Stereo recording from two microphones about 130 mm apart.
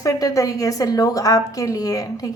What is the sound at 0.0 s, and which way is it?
A woman's voice, 25° left (ahead or behind).